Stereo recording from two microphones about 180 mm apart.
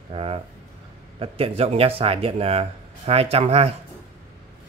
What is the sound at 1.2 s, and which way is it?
Speech, 35° right (ahead or behind).